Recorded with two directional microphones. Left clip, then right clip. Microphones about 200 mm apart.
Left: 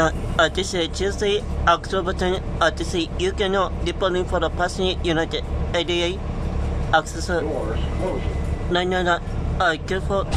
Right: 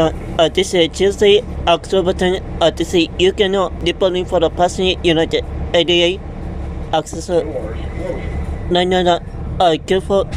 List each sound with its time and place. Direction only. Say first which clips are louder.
0.0 s speech: right 4 dB; 10° right (ahead or behind)
8.7 s speech: right 7 dB; 15° right (ahead or behind)